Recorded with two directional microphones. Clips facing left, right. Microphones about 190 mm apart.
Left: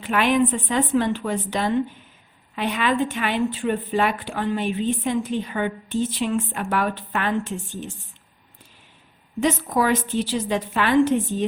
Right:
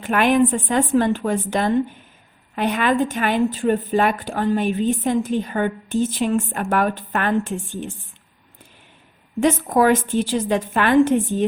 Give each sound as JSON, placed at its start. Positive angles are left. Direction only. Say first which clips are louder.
{"t": 0.0, "sound": "speech", "louder": "right 3 dB", "side_deg": -50}
{"t": 9.4, "sound": "speech", "louder": "right 4 dB", "side_deg": -50}